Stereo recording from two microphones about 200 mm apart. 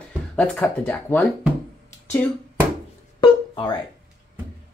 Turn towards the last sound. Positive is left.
turn(degrees=20)  # may be behind; listen again after turning